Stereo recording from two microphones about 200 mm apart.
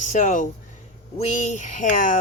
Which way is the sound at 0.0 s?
40° left (ahead or behind).